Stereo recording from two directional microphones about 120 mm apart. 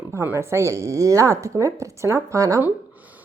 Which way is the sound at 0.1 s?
20° right (ahead or behind).